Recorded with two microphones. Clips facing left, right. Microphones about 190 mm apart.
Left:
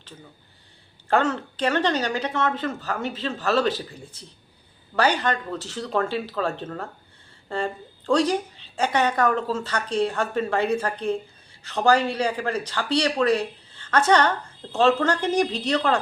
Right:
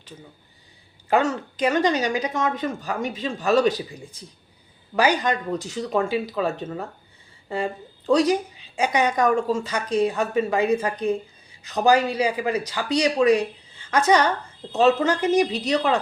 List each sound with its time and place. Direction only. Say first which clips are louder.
1.0 s a woman's voice: right 1 dB; 10° right (ahead or behind)